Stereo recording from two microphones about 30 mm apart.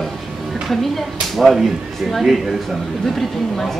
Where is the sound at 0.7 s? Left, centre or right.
Centre.